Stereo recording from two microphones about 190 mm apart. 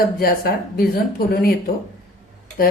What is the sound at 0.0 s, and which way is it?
A woman's voice, 50° left (ahead or behind).